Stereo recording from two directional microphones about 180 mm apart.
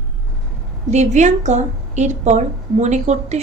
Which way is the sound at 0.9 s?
40° right (ahead or behind).